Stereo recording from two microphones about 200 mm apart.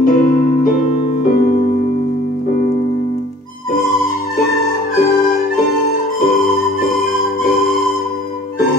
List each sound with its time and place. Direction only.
0.0 s music: 40° left (ahead or behind)